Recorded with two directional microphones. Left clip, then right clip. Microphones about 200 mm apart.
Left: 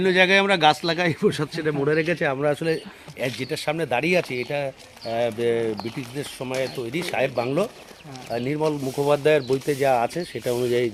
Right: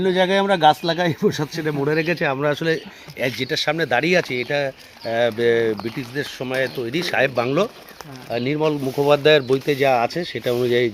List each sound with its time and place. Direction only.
0.0 s speech: centre (ahead or behind)
0.4 s speech: 30° right (ahead or behind)